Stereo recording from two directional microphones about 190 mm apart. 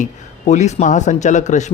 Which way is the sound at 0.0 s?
40° left (ahead or behind).